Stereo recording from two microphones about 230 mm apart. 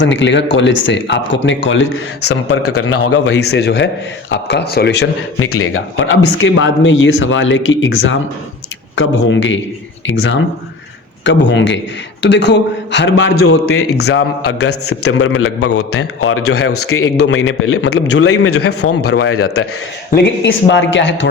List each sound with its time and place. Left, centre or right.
0.0 s speech: left
3.1 s speech: left
5.5 s speech: left
11.2 s a man's voice: left
20.1 s speech: left